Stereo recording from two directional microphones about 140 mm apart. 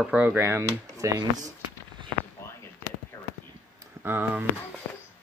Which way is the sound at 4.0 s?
15° right (ahead or behind).